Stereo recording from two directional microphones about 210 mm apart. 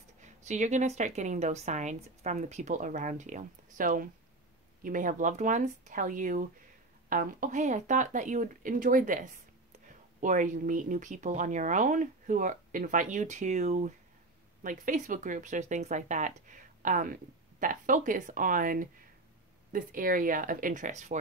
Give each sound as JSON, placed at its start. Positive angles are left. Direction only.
{"t": 0.2, "sound": "speech", "side_deg": -35}